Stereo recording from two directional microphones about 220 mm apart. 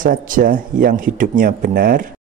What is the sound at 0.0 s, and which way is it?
A man's voice, 40° right (ahead or behind).